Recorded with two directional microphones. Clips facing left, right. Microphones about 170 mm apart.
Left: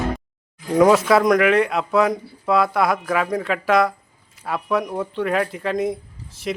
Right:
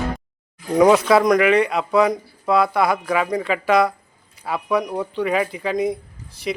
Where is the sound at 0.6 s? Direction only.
Centre (ahead or behind).